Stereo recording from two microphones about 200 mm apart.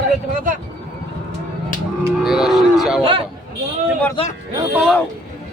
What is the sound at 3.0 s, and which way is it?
Speech, 25° right (ahead or behind).